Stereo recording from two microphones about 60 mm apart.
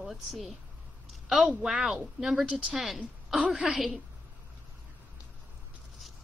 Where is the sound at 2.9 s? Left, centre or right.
Centre.